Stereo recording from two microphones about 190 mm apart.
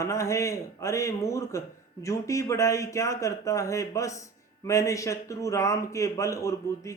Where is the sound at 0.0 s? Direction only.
15° left (ahead or behind).